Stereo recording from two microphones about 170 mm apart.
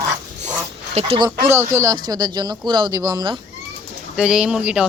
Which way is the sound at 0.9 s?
35° right (ahead or behind).